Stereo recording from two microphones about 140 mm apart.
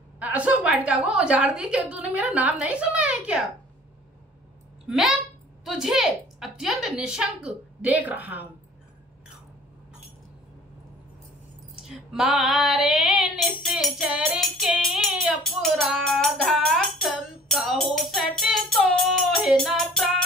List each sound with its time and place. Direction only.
0.2 s a woman's voice: 10° right (ahead or behind)
4.8 s speech: centre (ahead or behind)
5.7 s female singing: 5° right (ahead or behind)
11.9 s female singing: 5° right (ahead or behind)